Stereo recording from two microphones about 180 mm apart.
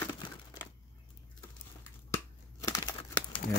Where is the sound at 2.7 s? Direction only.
20° left (ahead or behind).